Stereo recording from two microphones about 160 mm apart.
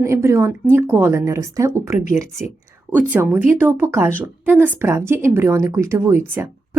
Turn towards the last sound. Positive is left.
turn(degrees=-15)  # may be behind; listen again after turning